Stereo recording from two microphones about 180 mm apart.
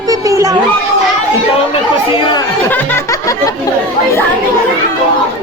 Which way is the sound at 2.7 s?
10° left (ahead or behind).